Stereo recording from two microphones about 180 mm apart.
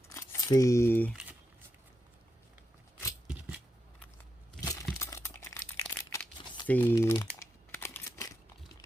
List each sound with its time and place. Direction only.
0.1 s speech: 15° left (ahead or behind)
4.6 s a sound: 20° left (ahead or behind)
4.9 s crumpling: 15° left (ahead or behind)